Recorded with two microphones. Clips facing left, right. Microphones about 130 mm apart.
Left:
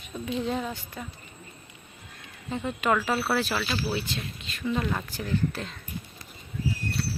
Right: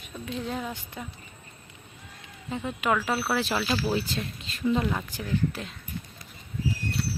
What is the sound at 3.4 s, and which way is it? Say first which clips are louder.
Speech: right 1 dB; 20° right (ahead or behind).